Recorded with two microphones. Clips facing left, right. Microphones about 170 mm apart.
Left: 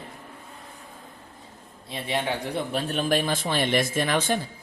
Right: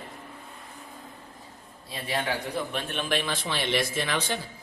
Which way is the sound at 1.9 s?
25° left (ahead or behind).